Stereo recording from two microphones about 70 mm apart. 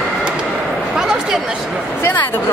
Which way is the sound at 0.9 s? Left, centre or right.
Centre.